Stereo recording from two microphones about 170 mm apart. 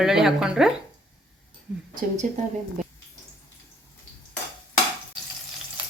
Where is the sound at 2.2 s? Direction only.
45° right (ahead or behind).